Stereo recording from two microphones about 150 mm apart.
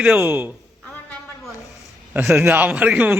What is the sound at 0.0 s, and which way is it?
Speech, 10° right (ahead or behind).